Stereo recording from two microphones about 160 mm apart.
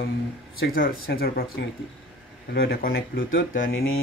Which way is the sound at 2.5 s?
70° left (ahead or behind).